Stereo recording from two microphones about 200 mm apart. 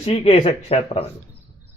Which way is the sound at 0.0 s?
30° left (ahead or behind).